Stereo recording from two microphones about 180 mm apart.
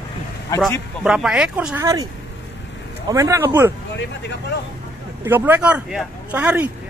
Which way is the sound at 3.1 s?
15° right (ahead or behind).